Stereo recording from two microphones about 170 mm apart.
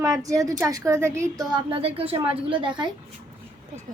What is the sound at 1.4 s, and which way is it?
Speech, 30° right (ahead or behind).